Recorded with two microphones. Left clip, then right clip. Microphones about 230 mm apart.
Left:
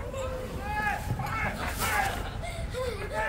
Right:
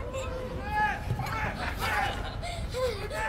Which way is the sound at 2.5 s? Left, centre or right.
Right.